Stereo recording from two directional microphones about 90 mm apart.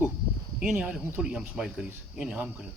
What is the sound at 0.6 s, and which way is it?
A man's voice, 10° right (ahead or behind).